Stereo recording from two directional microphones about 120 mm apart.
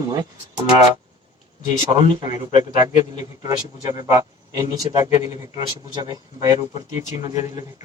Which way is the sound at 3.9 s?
30° right (ahead or behind).